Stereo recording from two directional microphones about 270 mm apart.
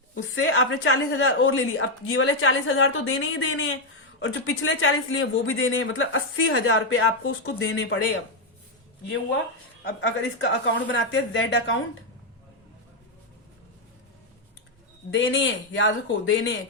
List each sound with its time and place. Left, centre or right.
0.1 s a man's voice: left
10.0 s a man's voice: left
15.1 s a man's voice: left